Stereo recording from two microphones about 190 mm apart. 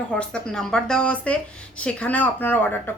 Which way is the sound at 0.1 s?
5° left (ahead or behind).